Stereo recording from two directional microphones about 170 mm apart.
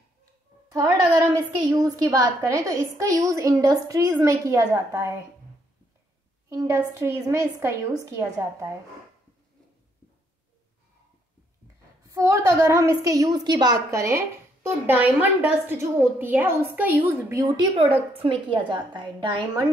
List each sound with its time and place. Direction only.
0.7 s a woman's voice: 20° right (ahead or behind)
6.5 s a woman's voice: 15° right (ahead or behind)
12.0 s a woman's voice: 20° right (ahead or behind)